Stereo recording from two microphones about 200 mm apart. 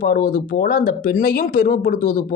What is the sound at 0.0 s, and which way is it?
Speech, 45° left (ahead or behind).